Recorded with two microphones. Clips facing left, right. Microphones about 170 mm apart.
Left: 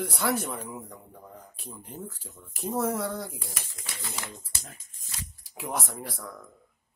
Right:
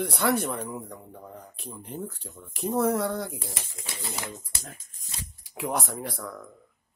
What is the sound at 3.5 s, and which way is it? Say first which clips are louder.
Speech: right 3 dB; 25° right (ahead or behind).